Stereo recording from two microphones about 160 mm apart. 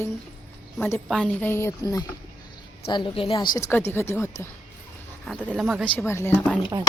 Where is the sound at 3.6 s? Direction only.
15° left (ahead or behind).